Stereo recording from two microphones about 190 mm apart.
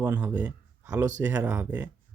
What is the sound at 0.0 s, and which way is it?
Speech, 10° right (ahead or behind).